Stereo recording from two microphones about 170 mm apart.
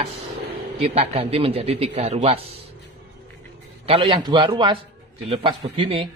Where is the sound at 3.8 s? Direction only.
30° right (ahead or behind).